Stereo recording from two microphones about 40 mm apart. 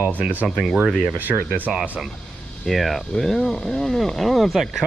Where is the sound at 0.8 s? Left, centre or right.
Centre.